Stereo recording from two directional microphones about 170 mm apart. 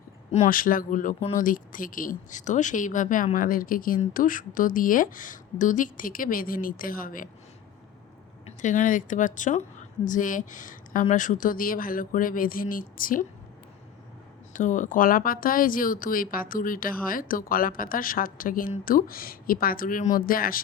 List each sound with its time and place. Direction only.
0.3 s speech: 40° left (ahead or behind)
0.5 s speech: 55° left (ahead or behind)
8.4 s a woman's voice: 45° left (ahead or behind)
14.5 s speech: 50° left (ahead or behind)